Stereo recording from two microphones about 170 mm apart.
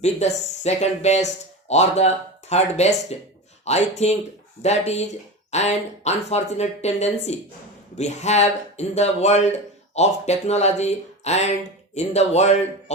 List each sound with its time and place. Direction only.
0.0 s speech: 40° left (ahead or behind)